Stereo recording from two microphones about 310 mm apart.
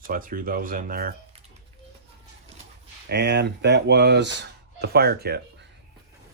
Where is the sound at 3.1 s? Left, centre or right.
Right.